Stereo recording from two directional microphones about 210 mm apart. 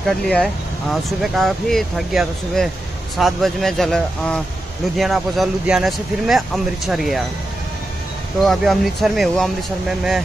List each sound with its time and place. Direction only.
0.3 s speech: 5° left (ahead or behind)
8.4 s speech: centre (ahead or behind)